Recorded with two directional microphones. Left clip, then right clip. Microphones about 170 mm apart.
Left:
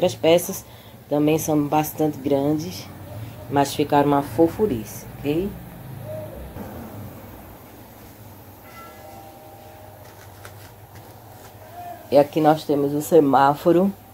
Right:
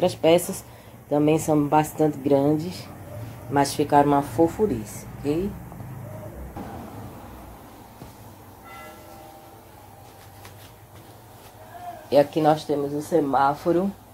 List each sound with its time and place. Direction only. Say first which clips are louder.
0.0 s speech: left 1 dB; centre (ahead or behind); by 2.8 s 15° right (ahead or behind)
3.5 s speech: even; centre (ahead or behind)
12.1 s speech: left 2 dB; 15° left (ahead or behind); by 13.8 s 35° left (ahead or behind)